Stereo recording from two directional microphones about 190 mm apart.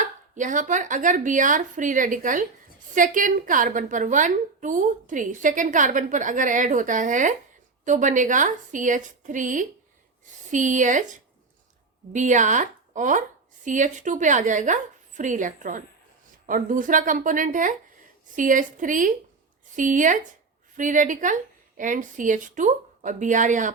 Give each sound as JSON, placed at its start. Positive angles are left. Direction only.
{"t": 0.0, "sound": "a woman's voice", "side_deg": -40}
{"t": 12.1, "sound": "a woman's voice", "side_deg": -40}